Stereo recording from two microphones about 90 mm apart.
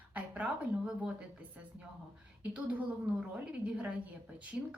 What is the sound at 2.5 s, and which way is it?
A woman's voice, 15° right (ahead or behind).